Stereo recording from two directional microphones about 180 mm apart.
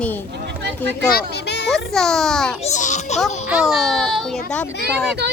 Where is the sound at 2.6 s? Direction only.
40° left (ahead or behind).